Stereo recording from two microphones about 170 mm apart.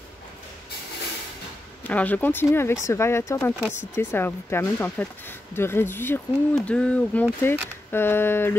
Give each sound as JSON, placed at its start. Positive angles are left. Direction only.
{"t": 1.9, "sound": "speech", "side_deg": 10}